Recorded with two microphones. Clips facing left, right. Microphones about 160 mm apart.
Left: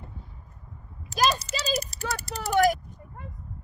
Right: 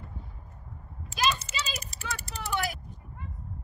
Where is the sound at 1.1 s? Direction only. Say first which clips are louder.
Left 4 dB; 35° left (ahead or behind).